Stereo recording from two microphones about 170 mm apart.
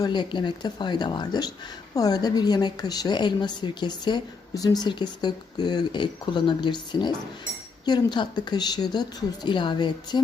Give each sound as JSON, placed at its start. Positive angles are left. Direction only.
{"t": 0.0, "sound": "speech", "side_deg": 25}